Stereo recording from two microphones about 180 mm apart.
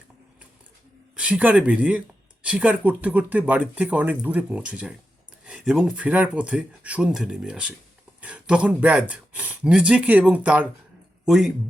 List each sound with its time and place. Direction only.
1.1 s speech: 5° right (ahead or behind)